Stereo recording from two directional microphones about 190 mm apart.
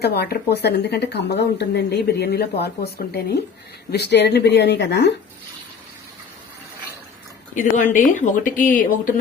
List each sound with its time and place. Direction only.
0.0 s a woman's voice: 55° left (ahead or behind)
7.5 s speech: 40° left (ahead or behind)